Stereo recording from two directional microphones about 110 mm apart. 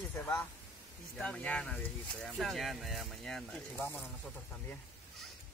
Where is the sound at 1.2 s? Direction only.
10° left (ahead or behind).